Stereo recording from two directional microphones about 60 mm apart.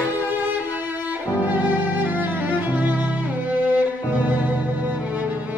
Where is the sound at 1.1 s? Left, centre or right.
Right.